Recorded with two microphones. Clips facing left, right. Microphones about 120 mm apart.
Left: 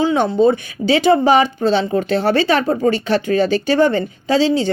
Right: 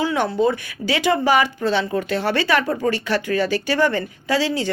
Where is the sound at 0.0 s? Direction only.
25° left (ahead or behind).